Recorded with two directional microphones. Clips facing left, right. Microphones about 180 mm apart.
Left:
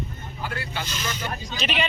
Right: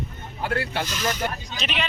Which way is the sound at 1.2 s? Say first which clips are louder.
Right 3 dB; 60° right (ahead or behind).